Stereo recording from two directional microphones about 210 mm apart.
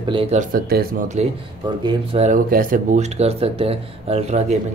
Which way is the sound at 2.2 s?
40° right (ahead or behind).